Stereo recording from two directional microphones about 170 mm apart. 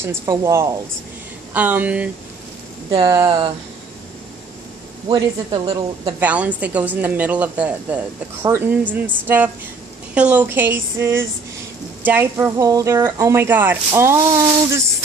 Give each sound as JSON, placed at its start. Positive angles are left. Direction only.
{"t": 0.4, "sound": "a woman's voice", "side_deg": -15}
{"t": 3.0, "sound": "speech", "side_deg": -20}
{"t": 5.0, "sound": "speech", "side_deg": -30}
{"t": 6.1, "sound": "a woman's voice", "side_deg": -10}